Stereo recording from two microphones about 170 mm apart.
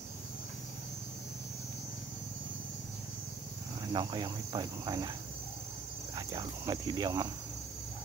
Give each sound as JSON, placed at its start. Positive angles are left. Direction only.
{"t": 3.9, "sound": "cricket", "side_deg": -25}
{"t": 6.1, "sound": "cricket", "side_deg": -25}